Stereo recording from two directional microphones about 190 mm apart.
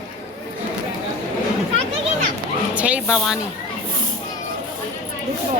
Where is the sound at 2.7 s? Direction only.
5° right (ahead or behind).